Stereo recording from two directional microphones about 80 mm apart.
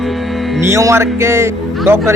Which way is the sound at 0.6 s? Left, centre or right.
Right.